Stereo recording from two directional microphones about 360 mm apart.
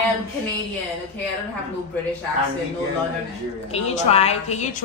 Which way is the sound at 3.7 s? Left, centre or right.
Centre.